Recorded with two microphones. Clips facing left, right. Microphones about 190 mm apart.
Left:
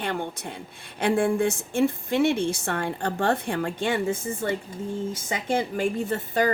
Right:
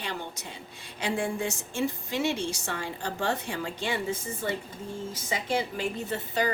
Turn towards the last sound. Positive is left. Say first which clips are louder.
# left 5 dB
turn(degrees=50)  # may be behind; listen again after turning